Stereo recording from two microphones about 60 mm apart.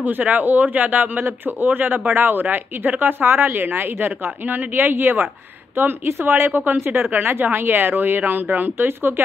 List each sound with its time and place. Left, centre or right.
0.0 s speech: right